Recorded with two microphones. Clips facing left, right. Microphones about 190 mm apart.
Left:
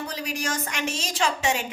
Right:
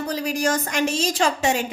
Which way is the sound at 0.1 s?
40° right (ahead or behind).